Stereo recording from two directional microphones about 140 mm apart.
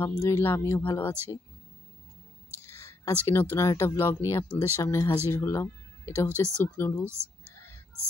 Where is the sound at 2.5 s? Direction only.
20° left (ahead or behind).